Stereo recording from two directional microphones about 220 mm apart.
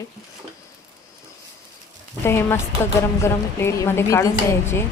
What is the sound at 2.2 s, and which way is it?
A woman's voice, 10° left (ahead or behind).